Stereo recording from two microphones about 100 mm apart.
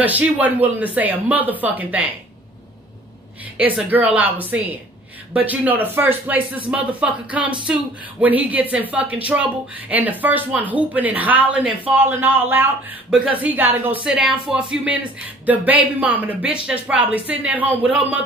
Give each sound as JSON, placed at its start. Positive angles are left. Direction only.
{"t": 0.0, "sound": "speech", "side_deg": -15}
{"t": 3.5, "sound": "speech", "side_deg": -15}